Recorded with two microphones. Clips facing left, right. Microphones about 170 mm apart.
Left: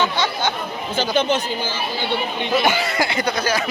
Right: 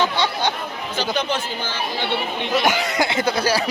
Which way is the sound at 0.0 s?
35° right (ahead or behind).